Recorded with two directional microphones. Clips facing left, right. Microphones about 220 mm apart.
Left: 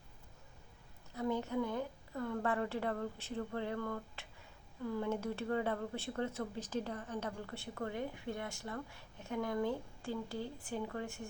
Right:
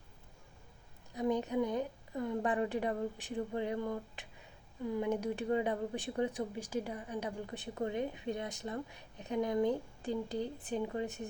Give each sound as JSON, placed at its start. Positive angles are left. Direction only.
{"t": 1.1, "sound": "a woman's voice", "side_deg": -15}